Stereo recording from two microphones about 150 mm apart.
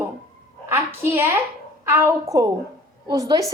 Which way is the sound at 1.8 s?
15° right (ahead or behind).